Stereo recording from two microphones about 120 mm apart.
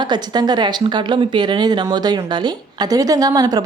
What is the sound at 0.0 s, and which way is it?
A woman's voice, 40° right (ahead or behind).